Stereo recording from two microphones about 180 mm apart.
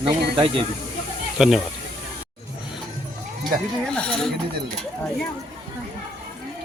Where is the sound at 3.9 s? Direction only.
5° left (ahead or behind).